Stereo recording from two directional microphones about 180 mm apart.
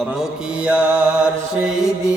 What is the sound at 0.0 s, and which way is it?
Mantra, centre (ahead or behind).